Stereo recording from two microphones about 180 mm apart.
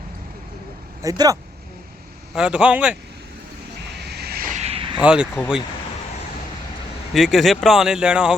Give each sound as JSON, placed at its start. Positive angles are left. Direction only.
{"t": 1.0, "sound": "speech", "side_deg": -20}
{"t": 2.3, "sound": "speech", "side_deg": -5}
{"t": 3.9, "sound": "vehicle", "side_deg": -65}
{"t": 4.9, "sound": "speech", "side_deg": -5}
{"t": 7.1, "sound": "speech", "side_deg": 0}